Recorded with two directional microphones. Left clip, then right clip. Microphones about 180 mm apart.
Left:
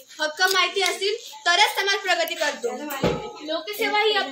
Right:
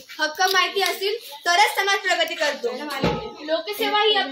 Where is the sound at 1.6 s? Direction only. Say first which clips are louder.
Right 3 dB; 15° left (ahead or behind).